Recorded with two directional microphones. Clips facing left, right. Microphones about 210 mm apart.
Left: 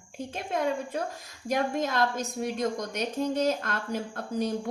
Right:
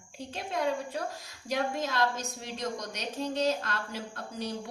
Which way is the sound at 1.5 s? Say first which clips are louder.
Left 4 dB; 50° left (ahead or behind).